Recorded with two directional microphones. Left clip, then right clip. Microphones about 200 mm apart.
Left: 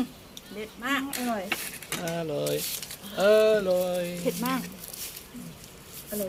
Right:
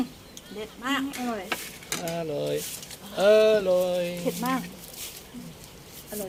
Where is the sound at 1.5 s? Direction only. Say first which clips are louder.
Even; 10° left (ahead or behind).